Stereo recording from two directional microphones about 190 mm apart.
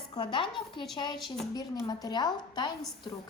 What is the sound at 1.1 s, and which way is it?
Speech, centre (ahead or behind).